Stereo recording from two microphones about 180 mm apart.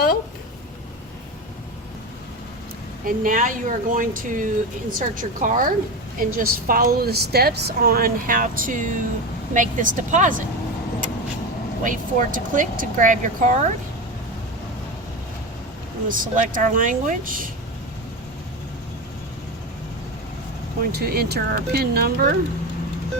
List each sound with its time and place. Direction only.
3.1 s speech: 50° right (ahead or behind)
11.8 s speech: 45° right (ahead or behind)
16.0 s speech: 50° right (ahead or behind)
21.0 s speech: 60° right (ahead or behind)